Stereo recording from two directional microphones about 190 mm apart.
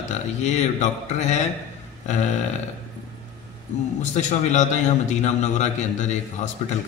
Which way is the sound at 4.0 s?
40° left (ahead or behind).